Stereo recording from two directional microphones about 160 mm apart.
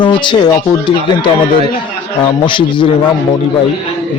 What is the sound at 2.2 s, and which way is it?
Speech, 30° left (ahead or behind).